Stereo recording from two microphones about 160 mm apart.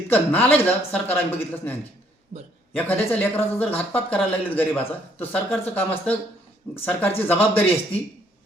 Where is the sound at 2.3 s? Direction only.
50° right (ahead or behind).